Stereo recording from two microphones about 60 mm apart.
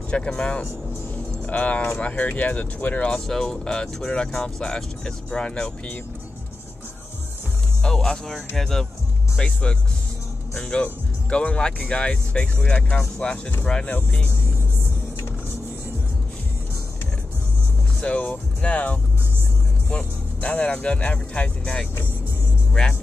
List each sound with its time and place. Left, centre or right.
0.1 s speech: centre
3.3 s speech: centre
7.8 s speech: centre
18.0 s speech: left